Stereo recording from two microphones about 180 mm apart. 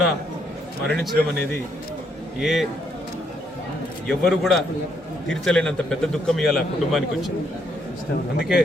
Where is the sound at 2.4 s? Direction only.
Centre (ahead or behind).